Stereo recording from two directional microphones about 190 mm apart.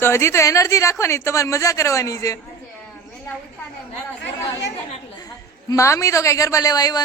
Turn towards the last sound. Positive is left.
turn(degrees=20)  # may be behind; listen again after turning